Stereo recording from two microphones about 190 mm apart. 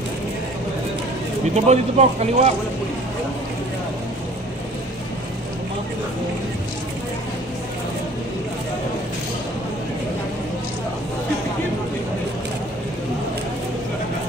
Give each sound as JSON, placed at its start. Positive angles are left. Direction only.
{"t": 1.5, "sound": "speech", "side_deg": -35}